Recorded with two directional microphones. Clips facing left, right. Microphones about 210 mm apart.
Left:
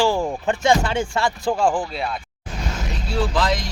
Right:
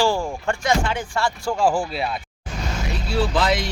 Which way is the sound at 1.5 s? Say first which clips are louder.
Even; 5° right (ahead or behind).